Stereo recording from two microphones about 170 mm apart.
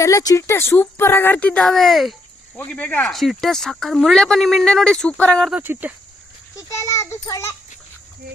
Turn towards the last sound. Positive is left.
turn(degrees=15)  # may be behind; listen again after turning